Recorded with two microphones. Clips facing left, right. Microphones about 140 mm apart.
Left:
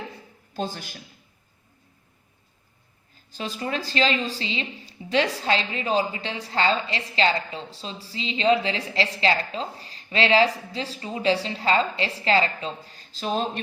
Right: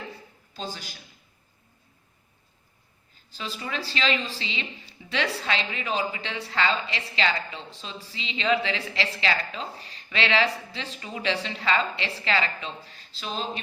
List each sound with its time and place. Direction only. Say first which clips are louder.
0.5 s a woman's voice: left 6 dB; 55° left (ahead or behind)
3.3 s a woman's voice: left 4 dB; 45° left (ahead or behind)